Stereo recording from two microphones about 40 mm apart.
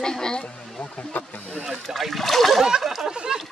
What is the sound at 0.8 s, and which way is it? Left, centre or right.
Speech, left.